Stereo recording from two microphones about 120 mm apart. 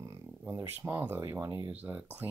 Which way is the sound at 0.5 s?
20° right (ahead or behind).